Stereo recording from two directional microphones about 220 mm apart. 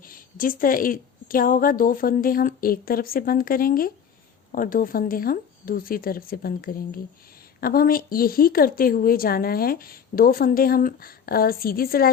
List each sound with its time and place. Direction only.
0.0 s a woman's voice: 40° left (ahead or behind)